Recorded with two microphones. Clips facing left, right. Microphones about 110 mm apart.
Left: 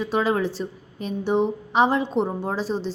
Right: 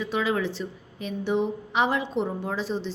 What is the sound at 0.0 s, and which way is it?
A woman's voice, 40° left (ahead or behind).